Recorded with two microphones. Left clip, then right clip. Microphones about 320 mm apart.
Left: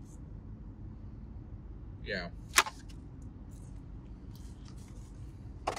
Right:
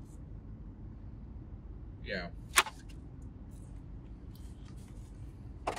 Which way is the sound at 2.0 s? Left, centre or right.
Centre.